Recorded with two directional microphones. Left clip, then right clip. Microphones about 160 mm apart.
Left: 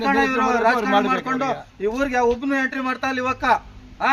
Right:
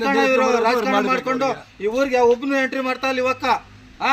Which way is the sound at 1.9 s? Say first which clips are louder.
Right 3 dB; 5° left (ahead or behind).